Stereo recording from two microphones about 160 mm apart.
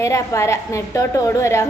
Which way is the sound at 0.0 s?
20° left (ahead or behind).